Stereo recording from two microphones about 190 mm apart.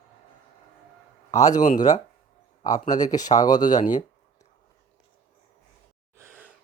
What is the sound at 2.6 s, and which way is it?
Speech, 20° left (ahead or behind).